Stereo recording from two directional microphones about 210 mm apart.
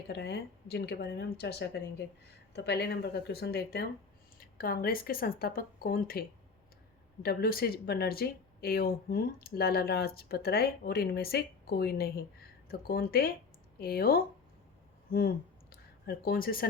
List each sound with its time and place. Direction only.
0.1 s speech: 50° left (ahead or behind)